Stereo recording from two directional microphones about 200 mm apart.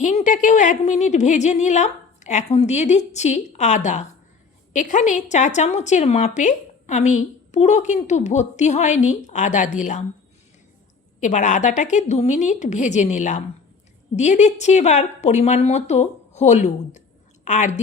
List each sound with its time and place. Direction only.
0.0 s a woman's voice: 35° left (ahead or behind)
11.2 s a woman's voice: 40° left (ahead or behind)